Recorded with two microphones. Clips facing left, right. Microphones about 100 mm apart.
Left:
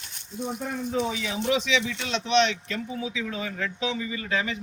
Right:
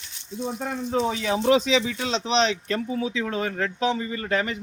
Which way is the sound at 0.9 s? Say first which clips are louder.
Right 5 dB; 50° right (ahead or behind).